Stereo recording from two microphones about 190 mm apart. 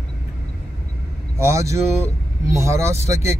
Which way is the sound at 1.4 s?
15° right (ahead or behind).